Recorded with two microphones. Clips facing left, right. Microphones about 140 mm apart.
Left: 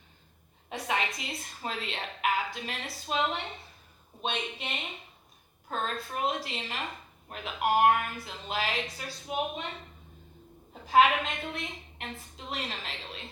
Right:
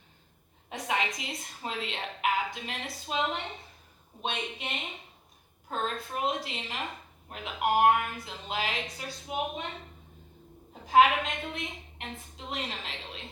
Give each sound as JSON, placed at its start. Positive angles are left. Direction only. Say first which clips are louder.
{"t": 0.7, "sound": "a woman's voice", "louder": "even", "side_deg": -20}
{"t": 5.8, "sound": "a woman's voice", "louder": "even", "side_deg": -20}
{"t": 10.8, "sound": "a woman's voice", "louder": "right 1 dB", "side_deg": -20}